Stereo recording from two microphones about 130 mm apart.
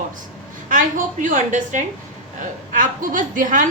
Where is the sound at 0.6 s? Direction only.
80° right.